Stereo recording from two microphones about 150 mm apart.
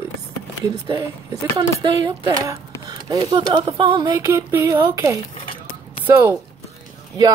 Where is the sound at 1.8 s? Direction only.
30° right (ahead or behind).